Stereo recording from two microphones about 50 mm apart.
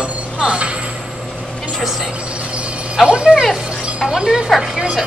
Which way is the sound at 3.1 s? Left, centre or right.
Right.